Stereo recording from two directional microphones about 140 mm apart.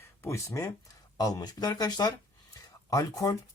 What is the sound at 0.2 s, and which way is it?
Speech, 20° left (ahead or behind).